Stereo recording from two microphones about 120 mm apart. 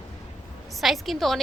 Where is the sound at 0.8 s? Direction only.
Centre (ahead or behind).